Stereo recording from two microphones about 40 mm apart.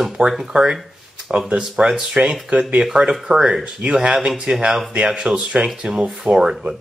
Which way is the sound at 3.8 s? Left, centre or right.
Right.